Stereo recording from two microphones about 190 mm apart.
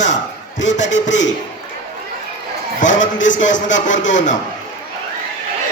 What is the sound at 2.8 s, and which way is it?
A man's voice, 40° left (ahead or behind).